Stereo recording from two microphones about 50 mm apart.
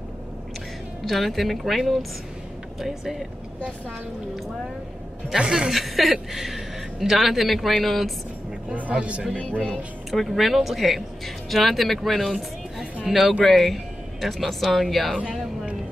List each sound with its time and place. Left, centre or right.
1.0 s speech: centre
5.4 s a woman's voice: centre
5.7 s speech: centre
8.9 s speech: right
9.4 s speech: centre
10.1 s speech: centre